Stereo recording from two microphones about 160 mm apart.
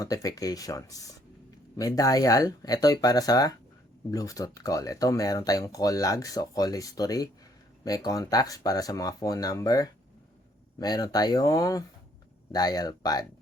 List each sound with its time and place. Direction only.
0.0 s speech: 20° left (ahead or behind)